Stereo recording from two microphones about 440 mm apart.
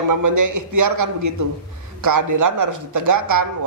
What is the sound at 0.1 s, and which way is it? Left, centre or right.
Speech, right.